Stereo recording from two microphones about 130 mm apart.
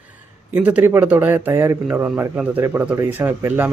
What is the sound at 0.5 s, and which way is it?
Speech, 15° right (ahead or behind).